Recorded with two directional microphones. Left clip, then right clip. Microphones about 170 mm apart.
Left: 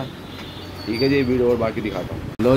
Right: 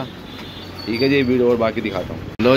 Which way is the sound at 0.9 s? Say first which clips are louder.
Right 2 dB; 5° right (ahead or behind).